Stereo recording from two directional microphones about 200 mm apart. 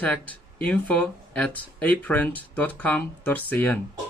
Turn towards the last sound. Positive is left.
turn(degrees=10)  # may be behind; listen again after turning